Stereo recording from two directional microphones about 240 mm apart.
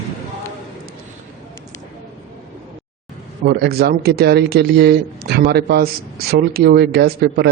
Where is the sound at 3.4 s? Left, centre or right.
Right.